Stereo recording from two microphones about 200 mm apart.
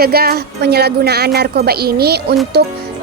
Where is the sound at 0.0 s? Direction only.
50° right (ahead or behind).